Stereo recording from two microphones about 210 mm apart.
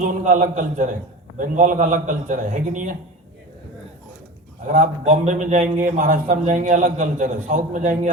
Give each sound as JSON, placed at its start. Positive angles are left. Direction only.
{"t": 0.3, "sound": "a man's voice", "side_deg": -35}
{"t": 4.7, "sound": "a man's voice", "side_deg": -40}